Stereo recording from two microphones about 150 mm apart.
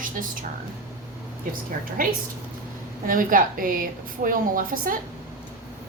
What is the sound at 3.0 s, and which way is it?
A woman's voice, 65° right (ahead or behind).